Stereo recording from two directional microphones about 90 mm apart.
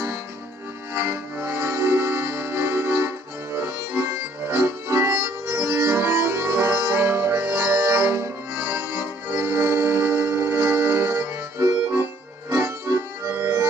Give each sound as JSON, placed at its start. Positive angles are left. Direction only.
{"t": 0.9, "sound": "music", "side_deg": -30}
{"t": 3.5, "sound": "accordion", "side_deg": -30}